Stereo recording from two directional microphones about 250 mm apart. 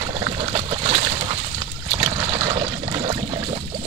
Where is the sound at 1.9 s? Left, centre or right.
Centre.